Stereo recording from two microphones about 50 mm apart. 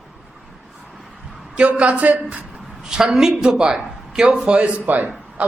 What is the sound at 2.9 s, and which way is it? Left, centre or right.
A man's voice, centre.